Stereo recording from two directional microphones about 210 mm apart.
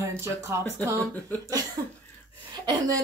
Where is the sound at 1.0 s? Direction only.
5° left (ahead or behind).